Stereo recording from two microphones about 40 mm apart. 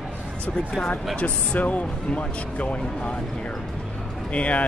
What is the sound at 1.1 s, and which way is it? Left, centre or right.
Speech, left.